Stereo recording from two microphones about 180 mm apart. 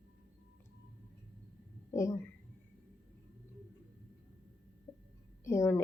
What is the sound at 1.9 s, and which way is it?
Speech, 15° left (ahead or behind).